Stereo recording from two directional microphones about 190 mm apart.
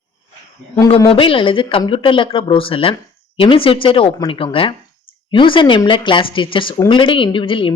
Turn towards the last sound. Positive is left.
turn(degrees=25)  # may be behind; listen again after turning